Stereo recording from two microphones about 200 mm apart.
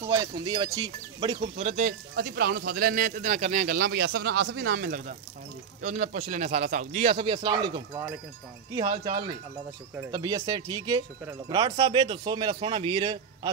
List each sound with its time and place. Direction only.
0.0 s speech: 15° right (ahead or behind)
8.7 s speech: 40° right (ahead or behind)
9.9 s speech: 15° right (ahead or behind)